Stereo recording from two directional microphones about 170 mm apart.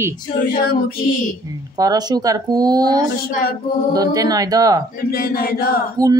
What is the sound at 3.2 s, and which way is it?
Chant, 65° left (ahead or behind).